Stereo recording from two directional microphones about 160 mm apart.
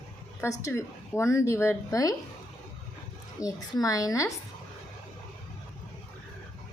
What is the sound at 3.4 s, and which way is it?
Speech, 20° left (ahead or behind).